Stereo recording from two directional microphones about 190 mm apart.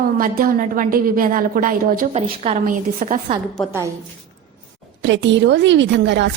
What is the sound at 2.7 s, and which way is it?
Speech, 45° right (ahead or behind).